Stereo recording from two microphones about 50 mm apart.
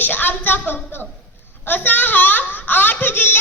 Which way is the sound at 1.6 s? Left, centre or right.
Left.